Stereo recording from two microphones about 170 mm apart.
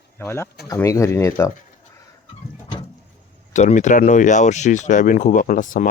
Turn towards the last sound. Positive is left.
turn(degrees=50)  # may be behind; listen again after turning